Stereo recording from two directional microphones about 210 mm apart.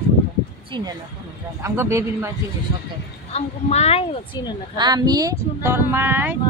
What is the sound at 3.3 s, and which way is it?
Speech, 30° left (ahead or behind).